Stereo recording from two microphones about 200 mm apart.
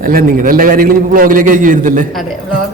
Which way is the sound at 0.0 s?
45° right (ahead or behind).